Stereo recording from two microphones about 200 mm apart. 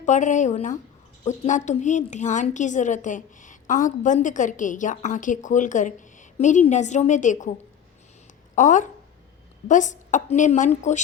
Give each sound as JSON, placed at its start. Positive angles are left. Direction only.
{"t": 0.0, "sound": "a woman's voice", "side_deg": 35}
{"t": 8.5, "sound": "a woman's voice", "side_deg": 40}